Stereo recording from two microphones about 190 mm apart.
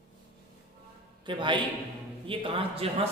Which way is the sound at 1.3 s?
25° right (ahead or behind).